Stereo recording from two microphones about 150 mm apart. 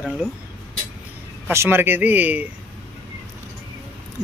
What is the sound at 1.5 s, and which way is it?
Speech, 15° right (ahead or behind).